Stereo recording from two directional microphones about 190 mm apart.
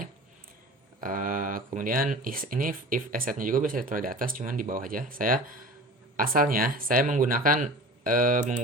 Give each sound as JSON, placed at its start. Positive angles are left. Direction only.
{"t": 1.0, "sound": "speech", "side_deg": -45}